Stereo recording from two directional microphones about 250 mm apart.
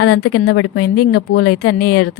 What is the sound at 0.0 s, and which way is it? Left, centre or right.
Speech, left.